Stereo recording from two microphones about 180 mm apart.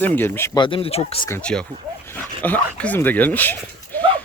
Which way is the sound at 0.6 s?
30° left (ahead or behind).